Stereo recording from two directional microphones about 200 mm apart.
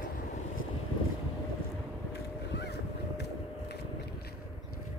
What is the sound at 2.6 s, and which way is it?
Boat, 55° left (ahead or behind).